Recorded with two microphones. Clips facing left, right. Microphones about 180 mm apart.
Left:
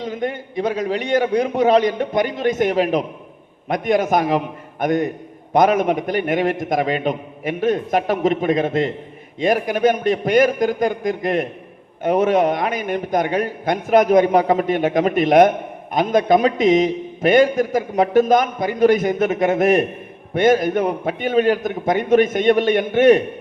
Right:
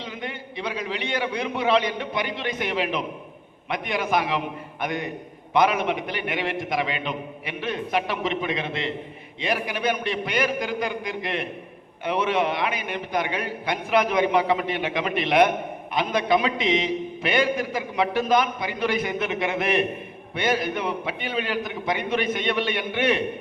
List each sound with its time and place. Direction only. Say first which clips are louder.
0.0 s a man's voice: left 9 dB; 45° left (ahead or behind)